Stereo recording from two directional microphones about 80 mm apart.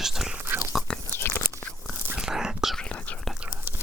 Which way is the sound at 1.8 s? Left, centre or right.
Centre.